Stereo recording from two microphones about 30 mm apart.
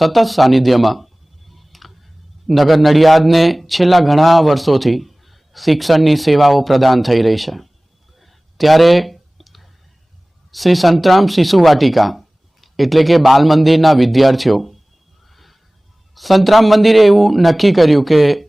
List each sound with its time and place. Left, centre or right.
0.0 s a sound: centre
2.5 s speech: centre
8.2 s clicking: centre
10.5 s speech: centre
15.3 s neigh: centre
16.1 s speech: centre